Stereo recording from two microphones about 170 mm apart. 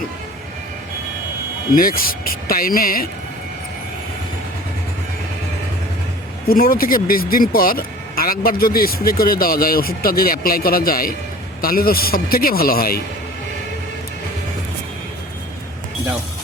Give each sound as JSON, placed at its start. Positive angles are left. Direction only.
{"t": 1.7, "sound": "speech", "side_deg": 60}
{"t": 6.5, "sound": "speech", "side_deg": 60}